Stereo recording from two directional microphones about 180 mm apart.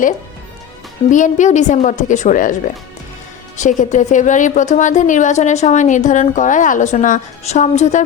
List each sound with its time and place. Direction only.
1.1 s a woman's voice: 45° left (ahead or behind)
3.6 s a woman's voice: 45° left (ahead or behind)